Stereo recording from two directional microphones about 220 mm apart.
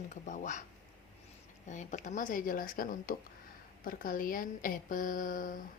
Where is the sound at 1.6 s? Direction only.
30° left (ahead or behind).